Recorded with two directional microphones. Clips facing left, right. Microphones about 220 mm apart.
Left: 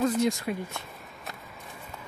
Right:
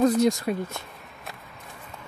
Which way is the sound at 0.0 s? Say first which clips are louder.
Right 5 dB; 40° right (ahead or behind).